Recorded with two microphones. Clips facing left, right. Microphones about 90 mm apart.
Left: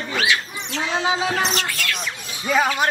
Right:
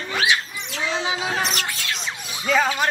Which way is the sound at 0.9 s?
35° left (ahead or behind).